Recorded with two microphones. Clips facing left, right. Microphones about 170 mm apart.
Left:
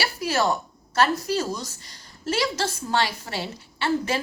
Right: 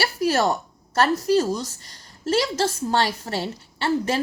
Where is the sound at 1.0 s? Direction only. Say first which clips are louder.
Right 6 dB; 35° right (ahead or behind).